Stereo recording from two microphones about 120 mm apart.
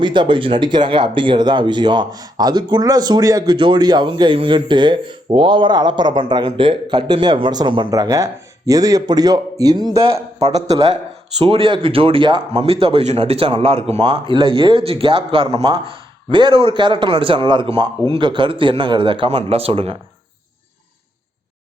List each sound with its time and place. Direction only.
0.0 s speech: 40° right (ahead or behind)
11.3 s speech: 50° right (ahead or behind)